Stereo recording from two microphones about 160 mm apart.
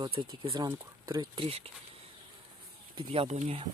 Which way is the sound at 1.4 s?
40° right (ahead or behind).